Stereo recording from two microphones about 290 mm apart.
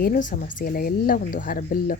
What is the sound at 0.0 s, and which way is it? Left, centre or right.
Speech, left.